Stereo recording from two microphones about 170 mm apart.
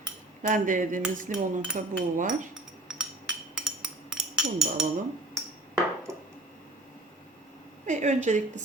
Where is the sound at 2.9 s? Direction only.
5° right (ahead or behind).